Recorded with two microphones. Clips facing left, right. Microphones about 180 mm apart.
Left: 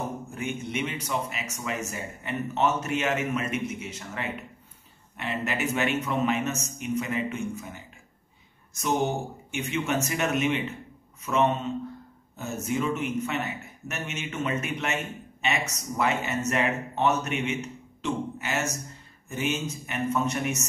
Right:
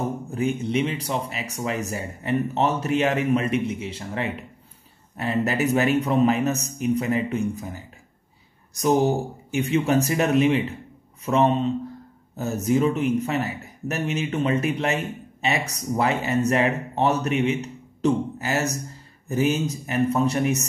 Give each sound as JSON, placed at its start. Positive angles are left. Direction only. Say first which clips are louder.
{"t": 0.3, "sound": "speech", "louder": "right 8 dB", "side_deg": -35}